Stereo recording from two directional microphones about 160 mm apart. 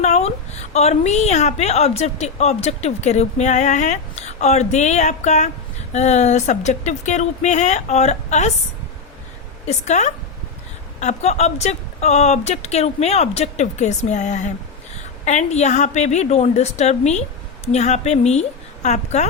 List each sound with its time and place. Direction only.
0.0 s a woman's voice: 45° left (ahead or behind)
9.6 s a woman's voice: 45° left (ahead or behind)